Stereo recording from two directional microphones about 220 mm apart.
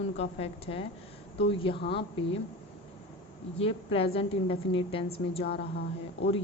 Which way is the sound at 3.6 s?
25° left (ahead or behind).